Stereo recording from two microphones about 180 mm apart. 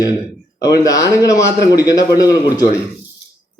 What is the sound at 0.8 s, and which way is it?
A man's voice, 20° left (ahead or behind).